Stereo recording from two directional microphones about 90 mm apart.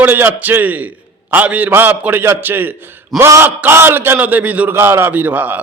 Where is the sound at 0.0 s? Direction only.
20° right (ahead or behind).